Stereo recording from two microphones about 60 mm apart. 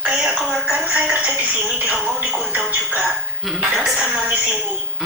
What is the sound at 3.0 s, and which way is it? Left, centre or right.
Speech, centre.